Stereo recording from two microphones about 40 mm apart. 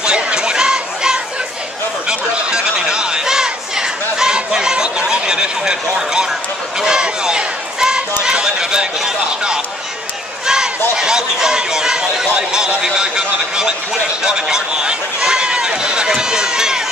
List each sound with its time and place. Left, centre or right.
0.0 s a sound: centre
2.0 s chatter: centre
6.8 s a sound: centre
10.4 s run: centre
14.2 s speech: centre
15.2 s run: right